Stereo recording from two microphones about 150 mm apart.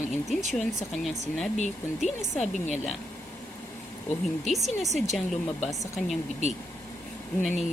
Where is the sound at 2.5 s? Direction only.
55° left (ahead or behind).